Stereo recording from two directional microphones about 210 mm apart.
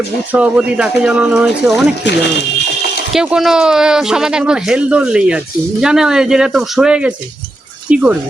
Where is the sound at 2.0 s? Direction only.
55° left (ahead or behind).